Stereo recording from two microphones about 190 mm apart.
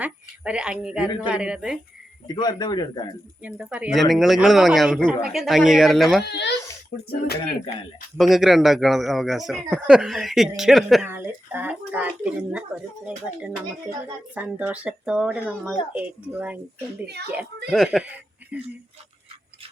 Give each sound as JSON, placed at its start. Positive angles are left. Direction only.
{"t": 0.0, "sound": "a man's voice", "side_deg": -5}
{"t": 2.2, "sound": "speech", "side_deg": 20}
{"t": 3.4, "sound": "a man's voice", "side_deg": -5}
{"t": 6.3, "sound": "a child's voice", "side_deg": 65}
{"t": 8.2, "sound": "a man's voice", "side_deg": 0}
{"t": 11.0, "sound": "speech", "side_deg": -10}
{"t": 17.7, "sound": "speech", "side_deg": 0}